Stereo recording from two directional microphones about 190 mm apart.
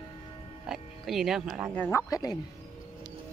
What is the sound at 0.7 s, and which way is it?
Speech, centre (ahead or behind).